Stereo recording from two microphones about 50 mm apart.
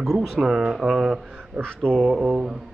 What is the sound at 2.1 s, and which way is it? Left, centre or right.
Speech, centre.